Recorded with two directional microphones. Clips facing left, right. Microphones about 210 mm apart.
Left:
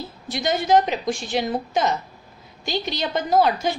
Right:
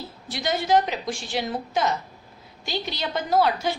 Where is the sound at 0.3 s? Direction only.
20° left (ahead or behind).